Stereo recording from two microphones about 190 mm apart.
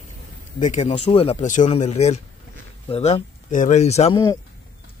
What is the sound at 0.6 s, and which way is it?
Speech, 40° left (ahead or behind).